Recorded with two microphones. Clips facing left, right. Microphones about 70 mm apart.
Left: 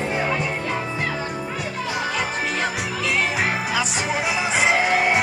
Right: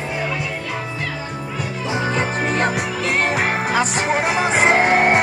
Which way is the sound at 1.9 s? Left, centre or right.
Right.